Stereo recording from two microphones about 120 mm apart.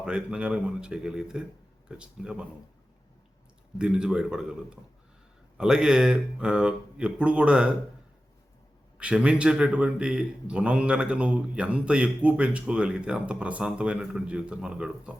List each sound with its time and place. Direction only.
0.0 s a man's voice: 5° right (ahead or behind)
3.8 s a man's voice: 5° right (ahead or behind)
9.0 s a man's voice: 10° right (ahead or behind)